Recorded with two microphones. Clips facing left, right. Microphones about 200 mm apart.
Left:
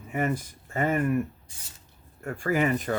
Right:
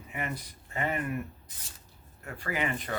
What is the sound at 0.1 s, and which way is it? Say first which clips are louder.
Speech: left 9 dB; 45° left (ahead or behind).